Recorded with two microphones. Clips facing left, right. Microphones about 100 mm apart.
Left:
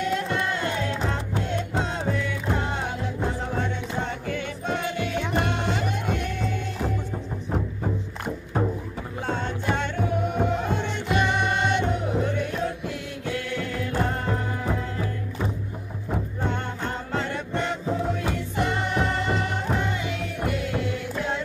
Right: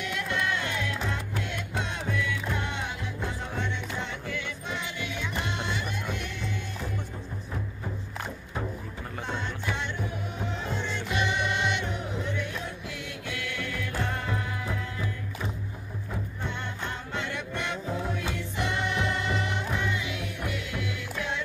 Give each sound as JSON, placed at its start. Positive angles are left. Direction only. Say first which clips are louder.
{"t": 0.0, "sound": "music", "louder": "left 5 dB", "side_deg": 35}
{"t": 9.3, "sound": "music", "louder": "left 7 dB", "side_deg": 45}
{"t": 13.3, "sound": "music", "louder": "left 6 dB", "side_deg": 35}